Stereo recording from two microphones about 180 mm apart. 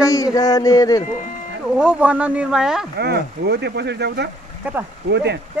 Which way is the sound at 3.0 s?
65° right (ahead or behind).